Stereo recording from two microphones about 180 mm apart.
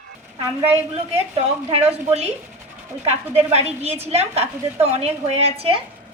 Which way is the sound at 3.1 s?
35° right (ahead or behind).